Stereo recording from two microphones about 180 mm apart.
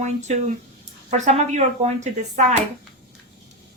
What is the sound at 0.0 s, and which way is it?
Speech, 40° right (ahead or behind).